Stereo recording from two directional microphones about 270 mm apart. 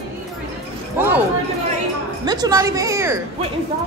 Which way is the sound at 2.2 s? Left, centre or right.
Centre.